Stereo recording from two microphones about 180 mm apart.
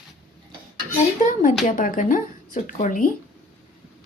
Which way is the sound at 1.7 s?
45° left (ahead or behind).